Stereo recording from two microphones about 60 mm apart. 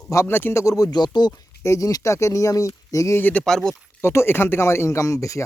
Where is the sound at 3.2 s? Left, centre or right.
Left.